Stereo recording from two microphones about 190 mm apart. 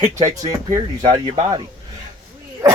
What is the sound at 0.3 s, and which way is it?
A man's voice, 20° right (ahead or behind).